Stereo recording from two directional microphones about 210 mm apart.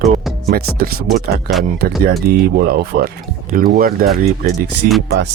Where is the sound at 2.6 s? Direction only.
45° right (ahead or behind).